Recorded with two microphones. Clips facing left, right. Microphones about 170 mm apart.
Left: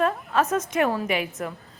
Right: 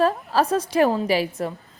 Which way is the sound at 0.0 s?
35° right (ahead or behind).